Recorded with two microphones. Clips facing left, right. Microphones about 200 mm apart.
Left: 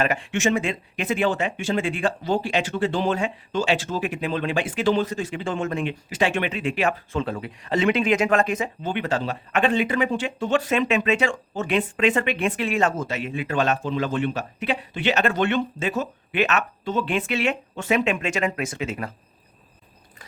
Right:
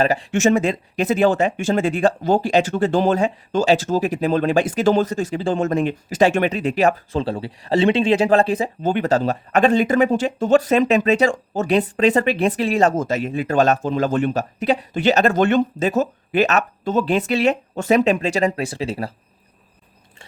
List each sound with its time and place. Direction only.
0.0 s speech: 35° right (ahead or behind)